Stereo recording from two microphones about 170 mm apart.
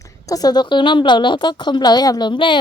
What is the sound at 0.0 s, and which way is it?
A woman's voice, 20° left (ahead or behind).